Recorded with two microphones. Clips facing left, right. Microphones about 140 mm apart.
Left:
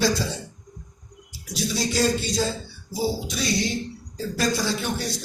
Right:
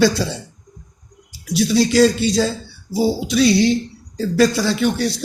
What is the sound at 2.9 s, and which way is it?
A man's voice, 75° right (ahead or behind).